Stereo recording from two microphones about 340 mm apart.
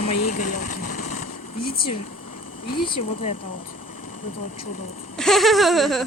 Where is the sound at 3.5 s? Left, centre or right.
Left.